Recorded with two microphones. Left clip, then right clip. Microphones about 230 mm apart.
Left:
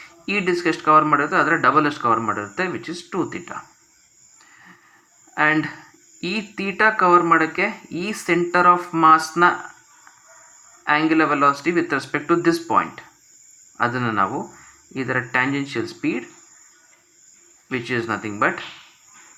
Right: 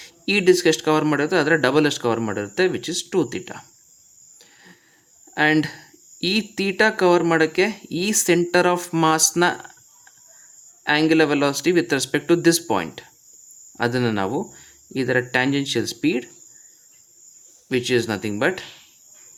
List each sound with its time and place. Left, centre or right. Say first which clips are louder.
0.0 s speech: right 4 dB; right
5.3 s speech: even; right
10.8 s speech: even; right
17.7 s speech: right 3 dB; right